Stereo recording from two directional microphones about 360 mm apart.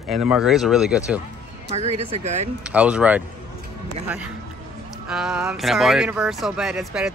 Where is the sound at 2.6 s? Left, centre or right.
Centre.